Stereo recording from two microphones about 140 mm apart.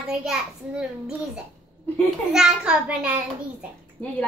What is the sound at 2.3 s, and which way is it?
Speech, 5° right (ahead or behind).